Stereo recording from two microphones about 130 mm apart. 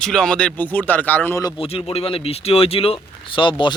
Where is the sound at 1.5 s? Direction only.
50° left (ahead or behind).